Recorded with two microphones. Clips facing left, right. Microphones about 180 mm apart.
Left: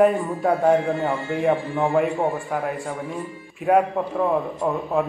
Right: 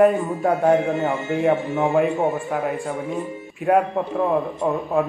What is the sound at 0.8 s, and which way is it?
A man's voice, 20° right (ahead or behind).